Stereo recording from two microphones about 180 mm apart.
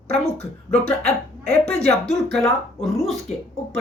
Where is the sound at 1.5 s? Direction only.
60° right (ahead or behind).